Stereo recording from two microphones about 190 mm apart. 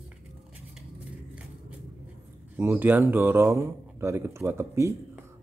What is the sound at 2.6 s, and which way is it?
Speech, 10° right (ahead or behind).